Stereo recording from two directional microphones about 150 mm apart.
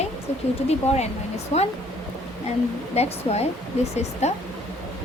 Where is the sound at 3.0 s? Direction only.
45° left (ahead or behind).